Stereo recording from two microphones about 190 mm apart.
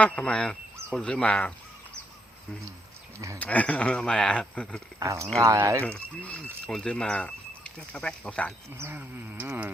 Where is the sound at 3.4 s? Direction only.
10° left (ahead or behind).